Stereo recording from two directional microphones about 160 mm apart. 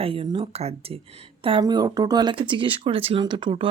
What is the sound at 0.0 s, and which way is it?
Speech, 35° right (ahead or behind).